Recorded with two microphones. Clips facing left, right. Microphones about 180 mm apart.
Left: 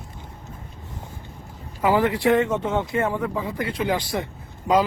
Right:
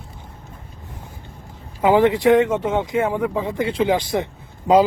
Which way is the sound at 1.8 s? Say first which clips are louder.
Right 5 dB; 20° right (ahead or behind).